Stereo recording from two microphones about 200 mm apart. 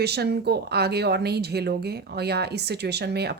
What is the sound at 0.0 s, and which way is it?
Speech, 55° right (ahead or behind).